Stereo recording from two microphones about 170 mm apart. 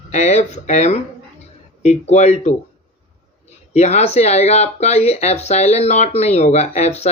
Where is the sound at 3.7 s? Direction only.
40° left (ahead or behind).